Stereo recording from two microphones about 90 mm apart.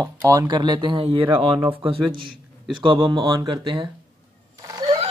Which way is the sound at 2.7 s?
65° right (ahead or behind).